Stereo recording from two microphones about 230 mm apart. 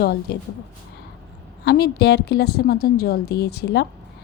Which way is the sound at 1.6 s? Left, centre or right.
Left.